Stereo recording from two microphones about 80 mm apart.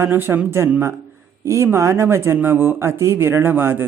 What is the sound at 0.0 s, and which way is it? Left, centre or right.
Speech, right.